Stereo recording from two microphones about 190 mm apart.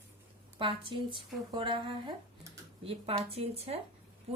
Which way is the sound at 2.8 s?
30° right (ahead or behind).